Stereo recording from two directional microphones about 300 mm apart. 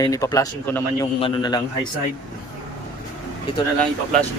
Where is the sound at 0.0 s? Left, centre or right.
Centre.